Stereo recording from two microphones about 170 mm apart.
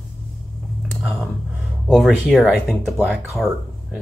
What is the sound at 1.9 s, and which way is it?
Speech, centre (ahead or behind).